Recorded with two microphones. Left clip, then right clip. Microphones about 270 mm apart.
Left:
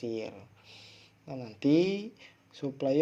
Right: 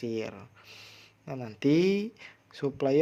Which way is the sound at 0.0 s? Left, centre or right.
Right.